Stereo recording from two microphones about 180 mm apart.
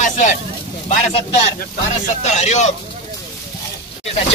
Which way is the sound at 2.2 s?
40° left (ahead or behind).